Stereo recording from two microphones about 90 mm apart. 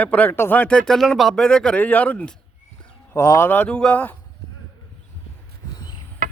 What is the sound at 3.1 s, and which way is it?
Speech, 30° left (ahead or behind).